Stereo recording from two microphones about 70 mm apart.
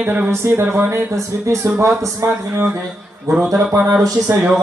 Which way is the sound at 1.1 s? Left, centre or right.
Right.